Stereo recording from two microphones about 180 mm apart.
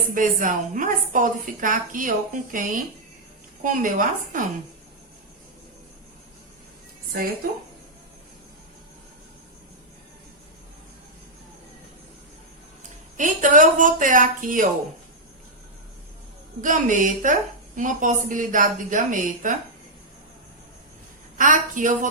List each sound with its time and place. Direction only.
0.1 s a woman's voice: 45° right (ahead or behind)
13.1 s a woman's voice: 45° right (ahead or behind)
16.6 s a woman's voice: 45° right (ahead or behind)
21.3 s a woman's voice: 45° right (ahead or behind)